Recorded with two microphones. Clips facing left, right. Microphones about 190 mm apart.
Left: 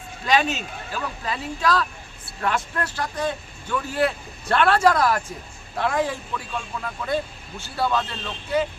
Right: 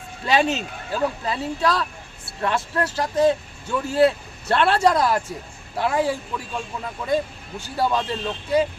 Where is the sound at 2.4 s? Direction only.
25° right (ahead or behind).